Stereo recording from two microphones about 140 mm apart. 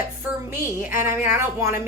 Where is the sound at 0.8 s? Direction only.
15° right (ahead or behind).